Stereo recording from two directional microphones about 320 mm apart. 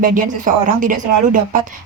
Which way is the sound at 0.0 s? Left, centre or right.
Right.